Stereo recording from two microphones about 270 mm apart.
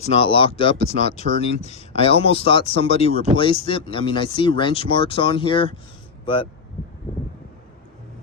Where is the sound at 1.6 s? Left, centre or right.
Left.